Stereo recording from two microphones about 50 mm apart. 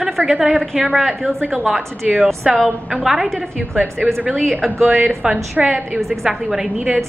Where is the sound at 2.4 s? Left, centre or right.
Centre.